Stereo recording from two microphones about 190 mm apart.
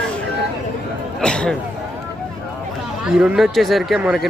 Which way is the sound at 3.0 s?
5° right (ahead or behind).